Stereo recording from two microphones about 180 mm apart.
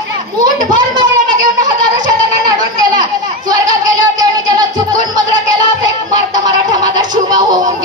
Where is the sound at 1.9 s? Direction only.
20° right (ahead or behind).